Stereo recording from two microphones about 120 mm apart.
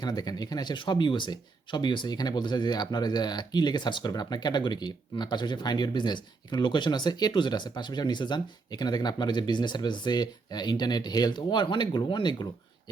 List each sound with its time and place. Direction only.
0.0 s speech: 35° left (ahead or behind)